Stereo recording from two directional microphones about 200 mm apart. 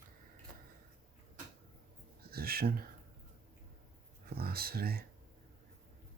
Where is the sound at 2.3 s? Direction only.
50° right (ahead or behind).